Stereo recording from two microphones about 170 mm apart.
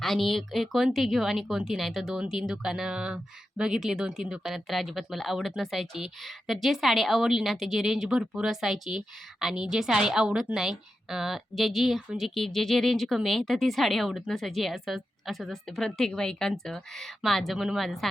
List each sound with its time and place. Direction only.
0.0 s speech: centre (ahead or behind)